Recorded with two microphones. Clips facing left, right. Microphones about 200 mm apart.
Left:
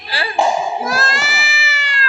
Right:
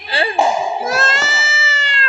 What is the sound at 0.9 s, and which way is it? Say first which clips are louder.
Cat: right 2 dB; 25° right (ahead or behind).